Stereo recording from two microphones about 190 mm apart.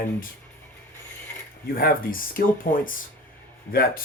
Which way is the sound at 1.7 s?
50° left (ahead or behind).